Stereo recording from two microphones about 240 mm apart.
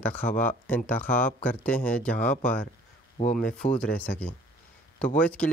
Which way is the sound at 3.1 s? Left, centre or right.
Left.